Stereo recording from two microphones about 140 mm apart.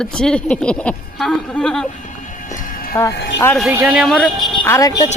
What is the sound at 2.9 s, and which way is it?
Speech, 20° left (ahead or behind).